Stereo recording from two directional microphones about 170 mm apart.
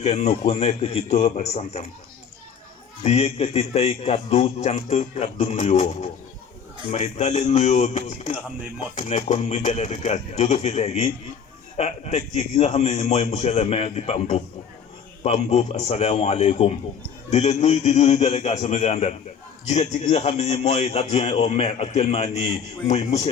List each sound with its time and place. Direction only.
0.0 s a man's voice: 40° left (ahead or behind)
3.0 s a man's voice: 40° left (ahead or behind)